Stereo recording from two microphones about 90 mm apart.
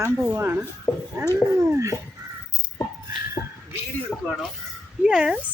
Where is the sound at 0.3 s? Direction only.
20° right (ahead or behind).